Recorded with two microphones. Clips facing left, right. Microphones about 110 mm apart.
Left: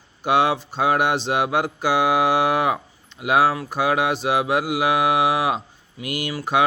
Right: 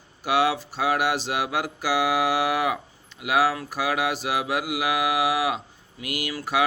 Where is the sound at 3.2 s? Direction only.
25° left (ahead or behind).